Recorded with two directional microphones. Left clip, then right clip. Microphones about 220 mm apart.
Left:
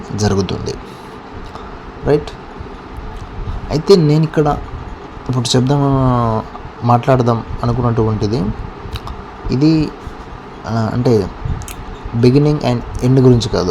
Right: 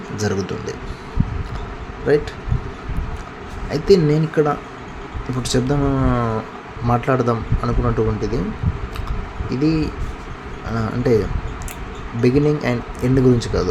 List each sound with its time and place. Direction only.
0.2 s speech: 20° left (ahead or behind)
2.1 s a man's voice: 15° left (ahead or behind)
3.7 s a man's voice: 15° left (ahead or behind)
9.5 s a man's voice: 20° left (ahead or behind)